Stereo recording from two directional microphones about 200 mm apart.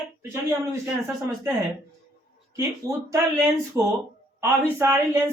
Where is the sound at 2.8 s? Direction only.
15° right (ahead or behind).